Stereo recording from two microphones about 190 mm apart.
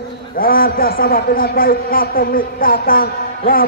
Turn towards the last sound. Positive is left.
turn(degrees=50)  # may be behind; listen again after turning